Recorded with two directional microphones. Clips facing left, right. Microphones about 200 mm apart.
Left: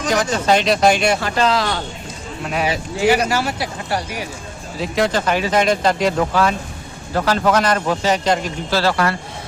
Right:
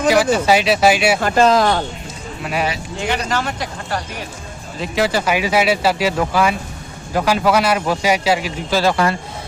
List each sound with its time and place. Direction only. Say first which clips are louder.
0.1 s speech: right 2 dB; 10° right (ahead or behind)
1.2 s speech: right 5 dB; 45° right (ahead or behind)
2.4 s a man's voice: left 1 dB; centre (ahead or behind)
4.8 s speech: even; 5° right (ahead or behind); by 9.1 s 20° right (ahead or behind)